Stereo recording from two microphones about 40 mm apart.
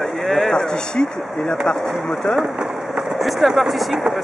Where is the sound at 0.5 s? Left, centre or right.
Centre.